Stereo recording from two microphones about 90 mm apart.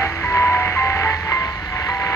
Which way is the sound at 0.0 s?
30° left (ahead or behind).